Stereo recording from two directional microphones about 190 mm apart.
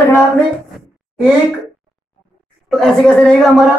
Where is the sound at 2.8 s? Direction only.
Centre (ahead or behind).